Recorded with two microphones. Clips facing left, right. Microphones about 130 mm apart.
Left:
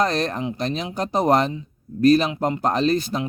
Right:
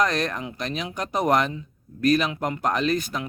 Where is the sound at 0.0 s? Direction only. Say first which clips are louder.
Left 2 dB; 30° left (ahead or behind).